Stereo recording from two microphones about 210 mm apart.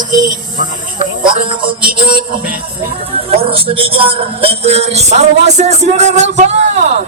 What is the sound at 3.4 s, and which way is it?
Speech, 25° right (ahead or behind).